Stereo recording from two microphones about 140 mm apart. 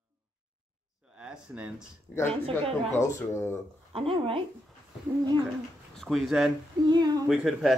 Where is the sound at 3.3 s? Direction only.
20° left (ahead or behind).